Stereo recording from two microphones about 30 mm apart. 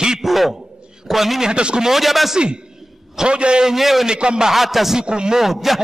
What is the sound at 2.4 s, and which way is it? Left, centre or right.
Speech, right.